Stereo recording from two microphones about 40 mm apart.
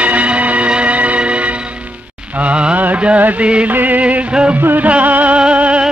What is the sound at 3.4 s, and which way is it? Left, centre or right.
Music, right.